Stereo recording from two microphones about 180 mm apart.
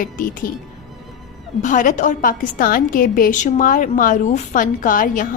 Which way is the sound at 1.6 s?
45° left (ahead or behind).